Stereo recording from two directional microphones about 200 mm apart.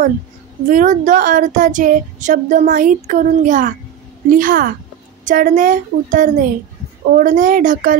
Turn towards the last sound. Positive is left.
turn(degrees=-40)  # may be behind; listen again after turning